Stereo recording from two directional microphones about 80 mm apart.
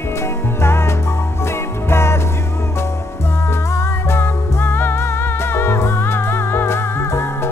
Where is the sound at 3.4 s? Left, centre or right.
Left.